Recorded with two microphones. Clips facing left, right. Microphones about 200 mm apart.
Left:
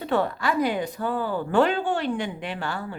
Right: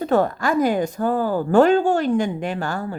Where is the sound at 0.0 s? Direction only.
45° right (ahead or behind).